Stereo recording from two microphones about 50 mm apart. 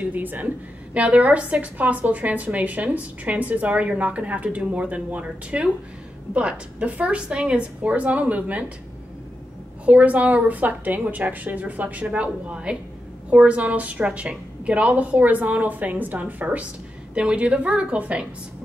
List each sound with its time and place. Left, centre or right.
0.0 s a woman's voice: right
9.8 s a woman's voice: right
17.1 s a woman's voice: right